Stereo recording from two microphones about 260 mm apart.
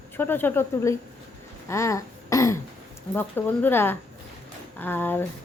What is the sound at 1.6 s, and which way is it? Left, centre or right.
Throat clearing, centre.